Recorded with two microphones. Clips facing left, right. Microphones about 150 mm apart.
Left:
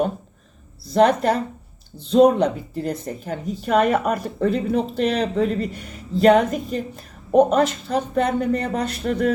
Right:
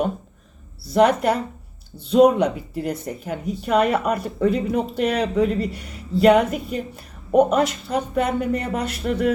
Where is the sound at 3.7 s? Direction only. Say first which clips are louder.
Left 1 dB; 45° left (ahead or behind).